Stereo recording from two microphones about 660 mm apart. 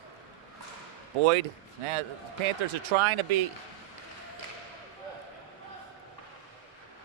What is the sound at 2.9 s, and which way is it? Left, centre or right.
Speech, right.